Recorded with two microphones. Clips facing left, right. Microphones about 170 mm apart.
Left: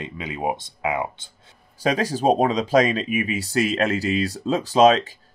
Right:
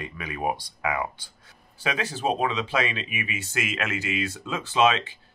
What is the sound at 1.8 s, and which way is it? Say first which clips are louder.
Speech: left 7 dB; 40° left (ahead or behind).